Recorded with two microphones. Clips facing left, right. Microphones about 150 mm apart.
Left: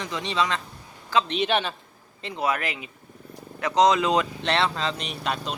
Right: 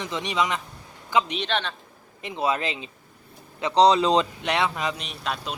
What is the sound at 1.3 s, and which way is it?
Speech, 5° left (ahead or behind).